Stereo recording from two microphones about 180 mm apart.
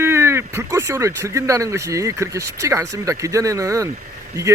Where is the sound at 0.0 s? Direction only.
15° right (ahead or behind).